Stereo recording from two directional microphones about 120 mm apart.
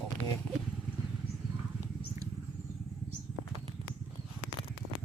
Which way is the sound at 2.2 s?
25° right (ahead or behind).